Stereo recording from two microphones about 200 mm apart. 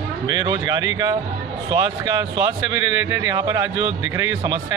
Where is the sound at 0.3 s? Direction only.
20° right (ahead or behind).